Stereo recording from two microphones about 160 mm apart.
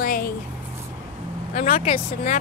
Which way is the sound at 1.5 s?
50° left (ahead or behind).